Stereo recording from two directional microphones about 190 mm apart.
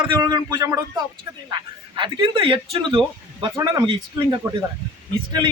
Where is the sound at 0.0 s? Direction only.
20° right (ahead or behind).